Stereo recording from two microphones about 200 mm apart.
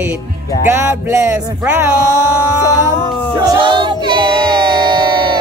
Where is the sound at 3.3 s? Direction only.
25° right (ahead or behind).